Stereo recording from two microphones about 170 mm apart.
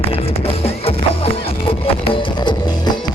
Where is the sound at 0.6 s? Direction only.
35° left (ahead or behind).